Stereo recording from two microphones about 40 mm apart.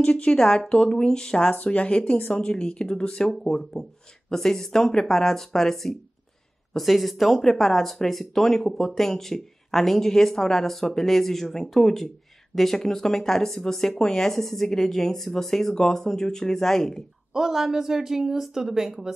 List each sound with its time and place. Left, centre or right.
0.3 s speech: left
1.5 s speech: left; by 17.0 s centre
17.3 s a woman's voice: centre